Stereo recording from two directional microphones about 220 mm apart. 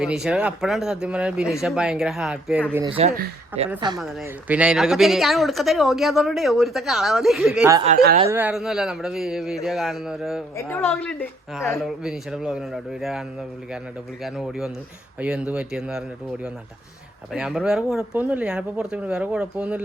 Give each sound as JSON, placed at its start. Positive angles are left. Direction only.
{"t": 0.0, "sound": "speech", "side_deg": -5}
{"t": 2.7, "sound": "speech", "side_deg": -20}
{"t": 3.9, "sound": "speech", "side_deg": 0}
{"t": 7.9, "sound": "speech", "side_deg": -30}
{"t": 8.3, "sound": "speech", "side_deg": -10}
{"t": 10.6, "sound": "a woman's voice", "side_deg": 10}
{"t": 11.8, "sound": "speech", "side_deg": 0}